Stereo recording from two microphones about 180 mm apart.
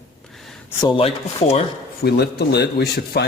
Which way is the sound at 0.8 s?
30° left (ahead or behind).